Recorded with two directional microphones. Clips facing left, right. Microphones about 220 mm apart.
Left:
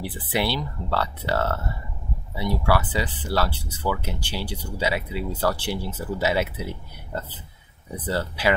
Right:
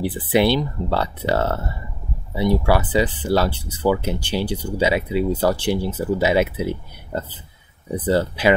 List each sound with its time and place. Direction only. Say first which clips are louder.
0.0 s speech: right 8 dB; 20° right (ahead or behind)
8.1 s speech: right 6 dB; 20° right (ahead or behind)